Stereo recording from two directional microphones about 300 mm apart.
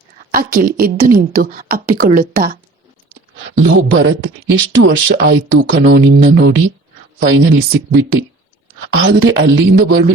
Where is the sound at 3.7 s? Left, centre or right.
Right.